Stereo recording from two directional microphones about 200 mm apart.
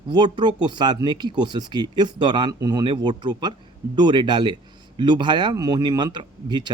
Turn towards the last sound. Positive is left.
turn(degrees=-20)  # may be behind; listen again after turning